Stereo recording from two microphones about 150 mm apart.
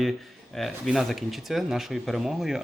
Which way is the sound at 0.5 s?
Centre (ahead or behind).